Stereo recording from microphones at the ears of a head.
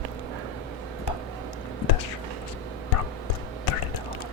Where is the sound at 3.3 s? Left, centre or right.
Left.